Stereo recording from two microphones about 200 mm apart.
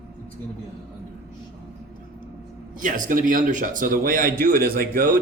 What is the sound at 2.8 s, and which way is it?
A man's voice, 40° right (ahead or behind).